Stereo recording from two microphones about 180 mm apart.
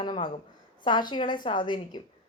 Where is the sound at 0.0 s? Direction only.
25° left (ahead or behind).